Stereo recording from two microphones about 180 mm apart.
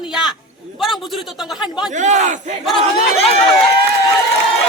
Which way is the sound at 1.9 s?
40° right (ahead or behind).